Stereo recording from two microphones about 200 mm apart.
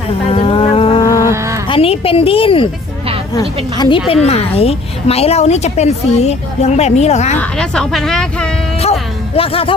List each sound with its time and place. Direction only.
0.3 s music: 30° left (ahead or behind)
1.0 s a sound: 15° left (ahead or behind)
1.6 s a woman's voice: 25° left (ahead or behind)
3.8 s a woman's voice: 25° left (ahead or behind)
7.3 s speech: 5° left (ahead or behind)
8.8 s a sound: 30° left (ahead or behind)